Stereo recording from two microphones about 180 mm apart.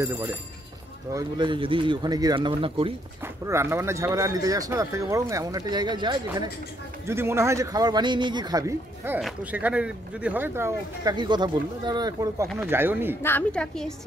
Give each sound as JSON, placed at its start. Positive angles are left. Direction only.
{"t": 0.0, "sound": "speech", "side_deg": -15}
{"t": 3.4, "sound": "speech", "side_deg": -15}
{"t": 13.2, "sound": "a woman's voice", "side_deg": 10}